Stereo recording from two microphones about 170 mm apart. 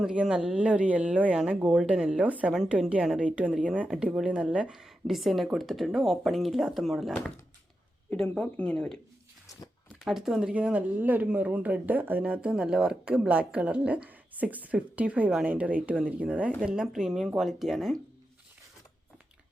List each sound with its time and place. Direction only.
0.0 s speech: 5° right (ahead or behind)
9.5 s a sound: 20° left (ahead or behind)
10.0 s speech: centre (ahead or behind)